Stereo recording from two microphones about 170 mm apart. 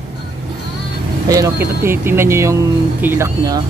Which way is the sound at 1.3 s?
20° right (ahead or behind).